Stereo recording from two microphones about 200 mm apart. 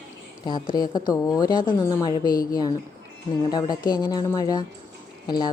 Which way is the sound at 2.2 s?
45° left (ahead or behind).